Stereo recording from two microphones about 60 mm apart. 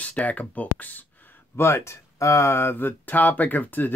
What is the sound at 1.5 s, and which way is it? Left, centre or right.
Speech, left.